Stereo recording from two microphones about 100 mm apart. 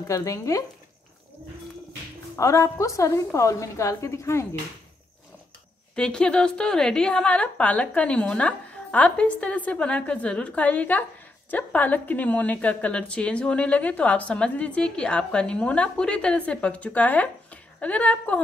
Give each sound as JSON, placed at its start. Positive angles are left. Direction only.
{"t": 0.1, "sound": "a woman's voice", "side_deg": 30}
{"t": 2.3, "sound": "a woman's voice", "side_deg": 30}
{"t": 5.9, "sound": "a woman's voice", "side_deg": 10}